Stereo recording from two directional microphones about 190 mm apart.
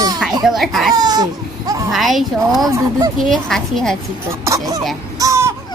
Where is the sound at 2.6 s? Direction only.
20° right (ahead or behind).